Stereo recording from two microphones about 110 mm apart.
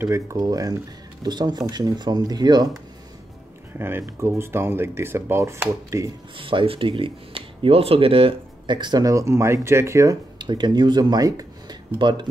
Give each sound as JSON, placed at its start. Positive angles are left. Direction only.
{"t": 0.0, "sound": "speech", "side_deg": -25}
{"t": 3.7, "sound": "speech", "side_deg": -20}
{"t": 6.3, "sound": "speech", "side_deg": -50}
{"t": 10.4, "sound": "speech", "side_deg": -40}